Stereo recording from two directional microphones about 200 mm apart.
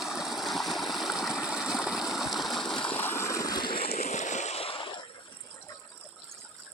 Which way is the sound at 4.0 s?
35° left (ahead or behind).